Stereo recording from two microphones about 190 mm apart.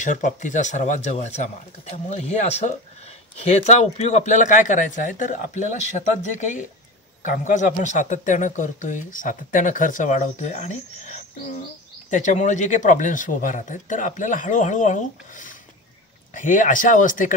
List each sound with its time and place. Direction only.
0.0 s a man's voice: 40° left (ahead or behind)